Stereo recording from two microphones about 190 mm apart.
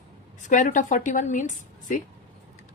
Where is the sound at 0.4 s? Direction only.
40° left (ahead or behind).